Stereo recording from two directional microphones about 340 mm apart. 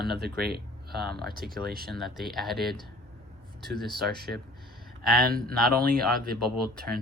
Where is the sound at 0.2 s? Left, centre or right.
Right.